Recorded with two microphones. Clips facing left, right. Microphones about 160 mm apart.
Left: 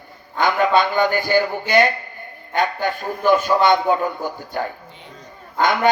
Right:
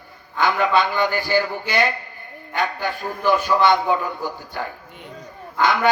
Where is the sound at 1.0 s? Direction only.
45° left (ahead or behind).